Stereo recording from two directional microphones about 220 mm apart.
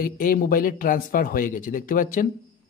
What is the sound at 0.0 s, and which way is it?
A man's voice, 40° left (ahead or behind).